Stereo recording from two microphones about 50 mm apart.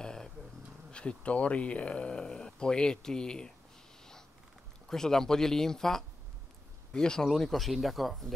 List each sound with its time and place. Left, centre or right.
0.0 s a sound: centre
0.9 s speech: left
4.8 s speech: centre